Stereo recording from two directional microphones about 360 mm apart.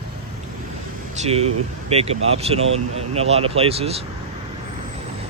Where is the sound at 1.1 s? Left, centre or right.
Centre.